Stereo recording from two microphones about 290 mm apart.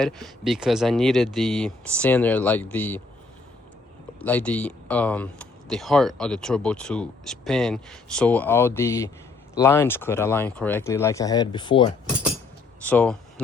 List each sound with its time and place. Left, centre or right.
0.0 s speech: centre
4.2 s speech: centre
12.8 s speech: centre